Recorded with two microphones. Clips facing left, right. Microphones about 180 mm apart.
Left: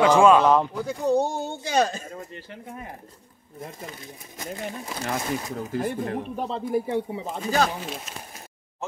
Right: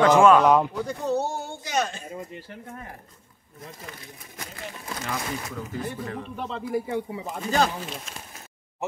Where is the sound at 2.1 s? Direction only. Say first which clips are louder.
Right 1 dB; 10° right (ahead or behind).